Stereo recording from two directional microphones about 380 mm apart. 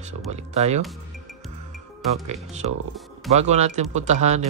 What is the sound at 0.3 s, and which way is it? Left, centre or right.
Speech, centre.